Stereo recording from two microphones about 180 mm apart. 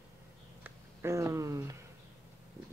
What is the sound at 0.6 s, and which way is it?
Speech, 15° right (ahead or behind).